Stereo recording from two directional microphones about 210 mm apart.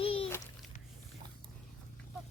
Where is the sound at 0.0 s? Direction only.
25° left (ahead or behind).